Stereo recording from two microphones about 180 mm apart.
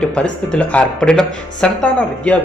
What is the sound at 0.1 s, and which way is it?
Speech, 5° left (ahead or behind).